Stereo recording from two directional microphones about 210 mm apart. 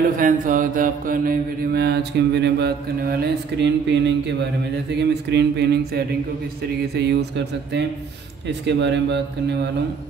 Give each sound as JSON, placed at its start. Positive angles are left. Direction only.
{"t": 0.2, "sound": "mantra", "side_deg": -40}
{"t": 8.5, "sound": "speech", "side_deg": -55}